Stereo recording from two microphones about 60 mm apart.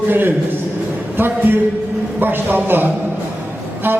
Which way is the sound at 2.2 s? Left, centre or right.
Right.